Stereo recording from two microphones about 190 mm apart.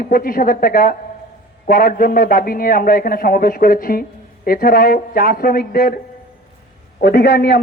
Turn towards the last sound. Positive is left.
turn(degrees=60)  # may be behind; listen again after turning